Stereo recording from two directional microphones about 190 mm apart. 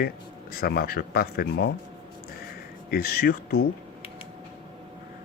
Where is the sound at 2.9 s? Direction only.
55° left (ahead or behind).